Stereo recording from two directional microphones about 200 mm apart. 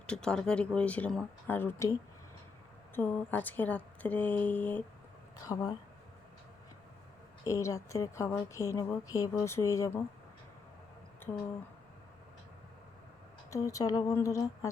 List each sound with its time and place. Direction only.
0.1 s a woman's voice: 5° left (ahead or behind)
7.4 s a woman's voice: 15° left (ahead or behind)
13.5 s a woman's voice: 15° left (ahead or behind)